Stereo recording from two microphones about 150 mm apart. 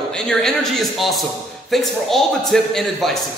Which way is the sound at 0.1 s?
5° left (ahead or behind).